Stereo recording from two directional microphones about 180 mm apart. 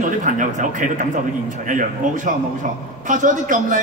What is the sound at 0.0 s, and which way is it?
Speech, 45° right (ahead or behind).